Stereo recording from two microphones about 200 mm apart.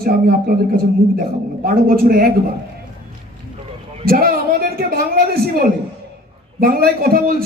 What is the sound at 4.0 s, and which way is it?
A man's voice, 45° right (ahead or behind).